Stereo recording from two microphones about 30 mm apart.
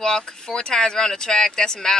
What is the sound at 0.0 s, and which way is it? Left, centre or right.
Speech, left.